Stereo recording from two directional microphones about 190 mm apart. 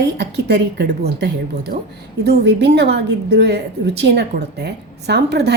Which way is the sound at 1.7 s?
50° right (ahead or behind).